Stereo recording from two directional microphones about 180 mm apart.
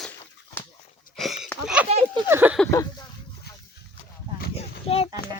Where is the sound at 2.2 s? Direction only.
10° right (ahead or behind).